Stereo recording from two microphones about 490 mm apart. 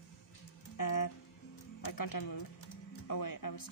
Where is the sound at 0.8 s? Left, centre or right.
Left.